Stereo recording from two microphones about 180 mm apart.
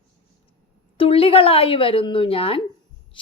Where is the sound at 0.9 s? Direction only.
30° left (ahead or behind).